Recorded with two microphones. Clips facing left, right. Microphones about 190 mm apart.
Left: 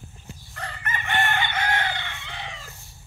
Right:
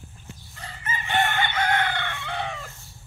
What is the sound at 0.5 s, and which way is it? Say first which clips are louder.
Chicken: left 1 dB; 65° left (ahead or behind).